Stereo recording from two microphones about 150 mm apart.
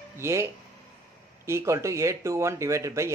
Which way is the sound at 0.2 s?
20° right (ahead or behind).